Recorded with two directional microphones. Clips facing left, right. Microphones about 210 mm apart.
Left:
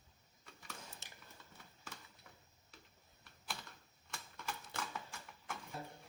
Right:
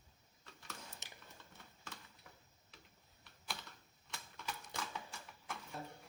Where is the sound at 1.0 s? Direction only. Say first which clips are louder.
Right 2 dB; 20° right (ahead or behind).